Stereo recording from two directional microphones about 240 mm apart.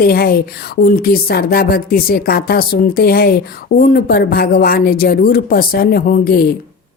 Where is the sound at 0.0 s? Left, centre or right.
Left.